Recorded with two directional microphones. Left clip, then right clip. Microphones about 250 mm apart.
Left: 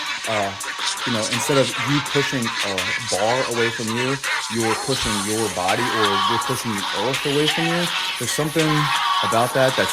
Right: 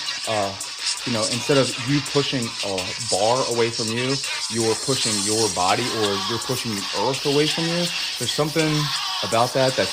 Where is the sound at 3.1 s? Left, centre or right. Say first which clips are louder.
Right 2 dB; centre.